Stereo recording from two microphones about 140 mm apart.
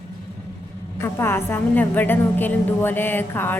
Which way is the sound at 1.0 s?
15° left (ahead or behind).